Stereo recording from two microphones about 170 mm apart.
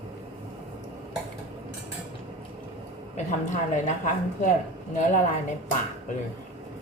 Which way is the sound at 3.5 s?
45° left (ahead or behind).